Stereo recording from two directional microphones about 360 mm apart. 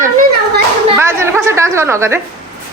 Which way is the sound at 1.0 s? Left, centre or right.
Centre.